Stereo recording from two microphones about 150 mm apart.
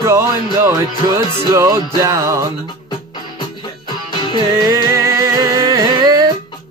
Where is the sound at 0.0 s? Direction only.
15° right (ahead or behind).